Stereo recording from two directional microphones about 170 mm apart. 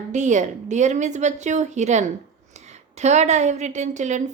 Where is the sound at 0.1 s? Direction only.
45° right (ahead or behind).